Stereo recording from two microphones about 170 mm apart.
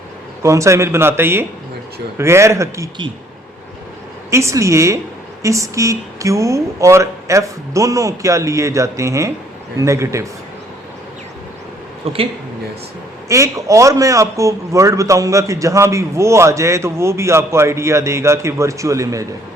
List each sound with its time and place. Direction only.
0.4 s a man's voice: 15° right (ahead or behind)
4.3 s a man's voice: 15° right (ahead or behind)
12.0 s speech: 35° right (ahead or behind)
13.2 s a man's voice: 20° right (ahead or behind)